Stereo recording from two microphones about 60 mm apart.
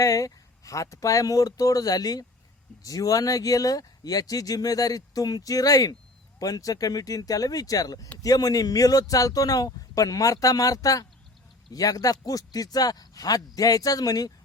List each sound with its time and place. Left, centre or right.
0.0 s speech: left
11.7 s speech: left